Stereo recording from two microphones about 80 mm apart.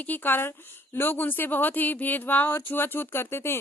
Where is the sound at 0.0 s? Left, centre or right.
Left.